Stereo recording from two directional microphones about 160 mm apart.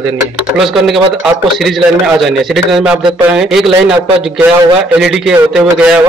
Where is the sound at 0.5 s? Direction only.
Centre (ahead or behind).